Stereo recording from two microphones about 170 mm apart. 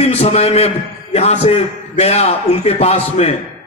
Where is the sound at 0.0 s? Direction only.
35° left (ahead or behind).